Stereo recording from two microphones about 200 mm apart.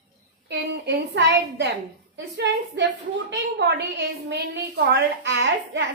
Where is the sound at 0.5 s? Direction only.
60° right (ahead or behind).